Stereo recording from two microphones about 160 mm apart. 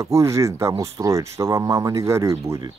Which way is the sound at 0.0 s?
20° right (ahead or behind).